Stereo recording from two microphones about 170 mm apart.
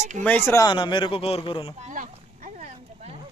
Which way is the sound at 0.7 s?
30° left (ahead or behind).